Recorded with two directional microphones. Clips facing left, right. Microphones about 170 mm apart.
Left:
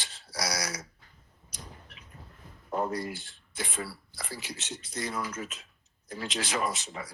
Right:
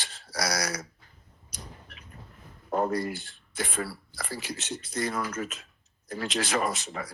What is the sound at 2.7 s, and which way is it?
Speech, 50° right (ahead or behind).